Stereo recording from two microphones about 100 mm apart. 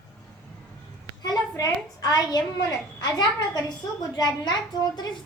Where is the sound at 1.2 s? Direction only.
40° left (ahead or behind).